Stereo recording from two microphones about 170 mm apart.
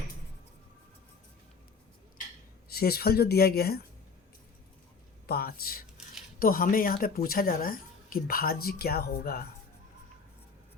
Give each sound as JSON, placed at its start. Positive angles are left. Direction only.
{"t": 2.6, "sound": "a woman's voice", "side_deg": 65}
{"t": 5.2, "sound": "a woman's voice", "side_deg": 65}